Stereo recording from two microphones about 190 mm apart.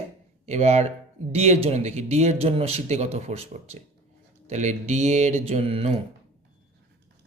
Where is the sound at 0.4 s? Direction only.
35° right (ahead or behind).